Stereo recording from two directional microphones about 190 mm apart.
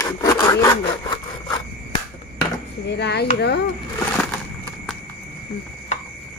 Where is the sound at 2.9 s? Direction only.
60° left (ahead or behind).